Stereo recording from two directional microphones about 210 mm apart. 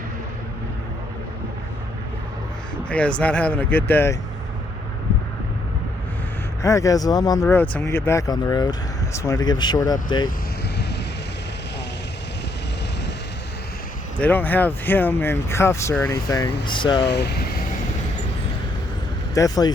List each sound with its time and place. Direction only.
2.9 s speech: 5° left (ahead or behind)
6.6 s speech: 15° left (ahead or behind)
7.4 s speech: 5° left (ahead or behind)
14.2 s speech: 10° left (ahead or behind)
17.1 s speech: 50° left (ahead or behind)
19.3 s speech: 15° left (ahead or behind)